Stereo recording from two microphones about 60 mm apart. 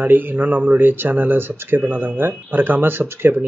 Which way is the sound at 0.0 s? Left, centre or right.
Right.